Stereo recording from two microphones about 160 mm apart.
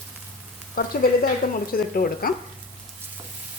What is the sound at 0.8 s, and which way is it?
Speech, 70° left (ahead or behind).